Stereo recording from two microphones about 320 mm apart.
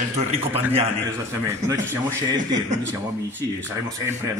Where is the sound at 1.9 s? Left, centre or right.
Centre.